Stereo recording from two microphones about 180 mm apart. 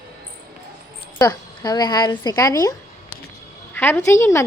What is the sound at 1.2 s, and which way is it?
A woman's voice, 20° left (ahead or behind).